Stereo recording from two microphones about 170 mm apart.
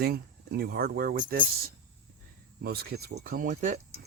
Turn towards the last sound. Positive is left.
turn(degrees=-50)  # may be behind; listen again after turning